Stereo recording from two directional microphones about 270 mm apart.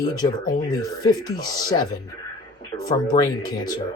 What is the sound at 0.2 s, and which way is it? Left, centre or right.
Speech, centre.